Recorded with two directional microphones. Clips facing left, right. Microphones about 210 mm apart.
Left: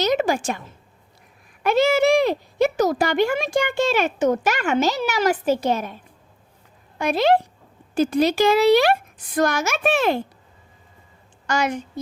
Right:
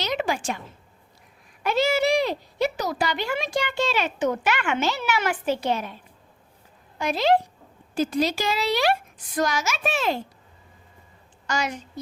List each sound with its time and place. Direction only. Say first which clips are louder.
0.0 s a woman's voice: left 6 dB; 45° left (ahead or behind)
1.6 s speech: left 5 dB; 55° left (ahead or behind)
7.0 s a woman's voice: left 3 dB; 55° left (ahead or behind)
11.4 s a woman's voice: left 5 dB; 55° left (ahead or behind)